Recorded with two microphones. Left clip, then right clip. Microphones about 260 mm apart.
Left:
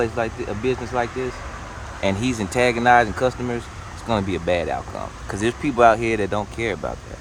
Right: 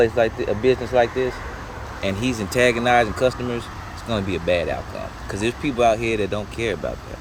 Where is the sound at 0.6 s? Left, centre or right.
Centre.